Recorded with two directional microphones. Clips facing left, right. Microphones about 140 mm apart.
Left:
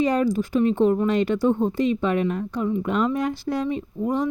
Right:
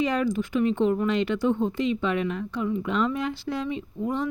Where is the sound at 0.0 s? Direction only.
40° left (ahead or behind).